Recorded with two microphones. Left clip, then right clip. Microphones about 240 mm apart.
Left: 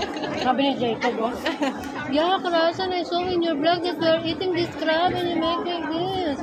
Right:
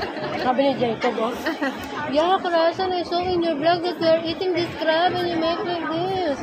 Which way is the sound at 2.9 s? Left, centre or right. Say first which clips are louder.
Right 1 dB; right.